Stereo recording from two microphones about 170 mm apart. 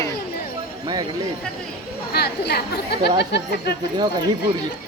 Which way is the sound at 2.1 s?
70° left (ahead or behind).